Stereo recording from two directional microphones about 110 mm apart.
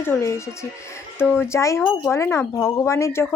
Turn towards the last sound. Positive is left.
turn(degrees=25)  # may be behind; listen again after turning